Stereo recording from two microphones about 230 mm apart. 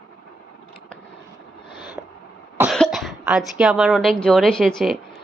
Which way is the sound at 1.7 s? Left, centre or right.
Centre.